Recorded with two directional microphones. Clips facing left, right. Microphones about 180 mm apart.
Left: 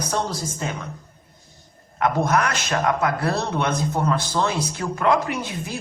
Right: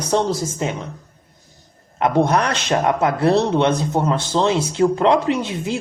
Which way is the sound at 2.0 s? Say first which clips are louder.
Right 4 dB; 30° right (ahead or behind).